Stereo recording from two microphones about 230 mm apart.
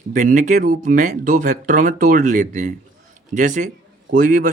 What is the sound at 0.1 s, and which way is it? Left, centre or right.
Speech, right.